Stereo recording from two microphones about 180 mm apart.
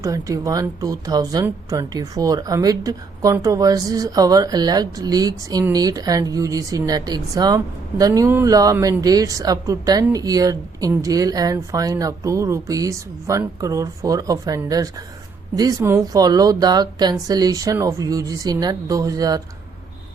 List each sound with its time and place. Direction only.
0.0 s speech: 20° right (ahead or behind)